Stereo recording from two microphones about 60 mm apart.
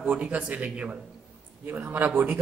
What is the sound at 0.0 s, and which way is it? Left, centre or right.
A man's voice, right.